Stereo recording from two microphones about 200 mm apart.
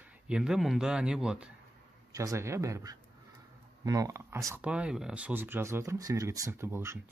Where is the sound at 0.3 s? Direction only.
5° right (ahead or behind).